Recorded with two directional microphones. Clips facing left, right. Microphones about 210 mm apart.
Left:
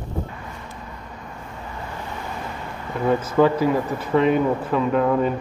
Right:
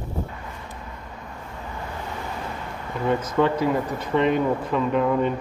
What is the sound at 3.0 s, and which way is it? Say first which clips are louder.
Speech: left 3 dB; centre (ahead or behind).